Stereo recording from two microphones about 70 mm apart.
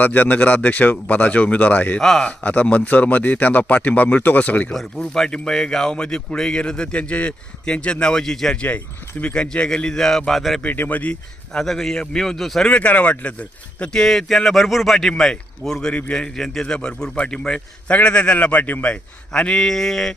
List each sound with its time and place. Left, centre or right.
0.0 s a man's voice: left
2.0 s speech: centre
2.4 s a man's voice: left
4.7 s speech: centre
10.6 s a man's voice: left
11.5 s speech: centre
12.6 s speech: centre
15.9 s a man's voice: centre
19.3 s speech: centre